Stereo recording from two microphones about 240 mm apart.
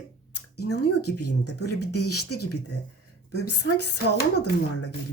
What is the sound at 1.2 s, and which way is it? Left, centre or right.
Speech, left.